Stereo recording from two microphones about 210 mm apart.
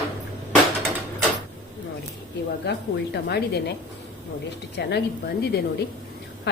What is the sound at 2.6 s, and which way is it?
Speech, 50° left (ahead or behind).